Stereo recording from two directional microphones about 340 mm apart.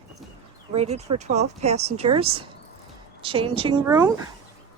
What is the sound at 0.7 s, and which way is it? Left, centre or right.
Speech, centre.